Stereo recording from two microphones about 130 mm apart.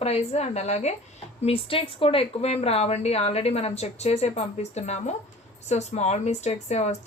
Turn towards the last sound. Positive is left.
turn(degrees=55)  # may be behind; listen again after turning